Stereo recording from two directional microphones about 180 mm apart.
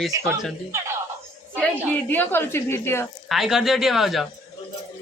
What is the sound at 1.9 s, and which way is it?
A woman's voice, 10° left (ahead or behind).